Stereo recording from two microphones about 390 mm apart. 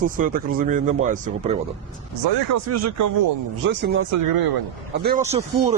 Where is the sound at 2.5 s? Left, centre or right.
Right.